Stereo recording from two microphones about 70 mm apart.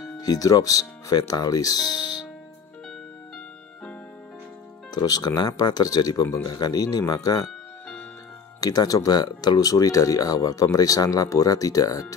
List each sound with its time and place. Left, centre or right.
0.0 s speech: left
4.9 s speech: left
8.5 s speech: left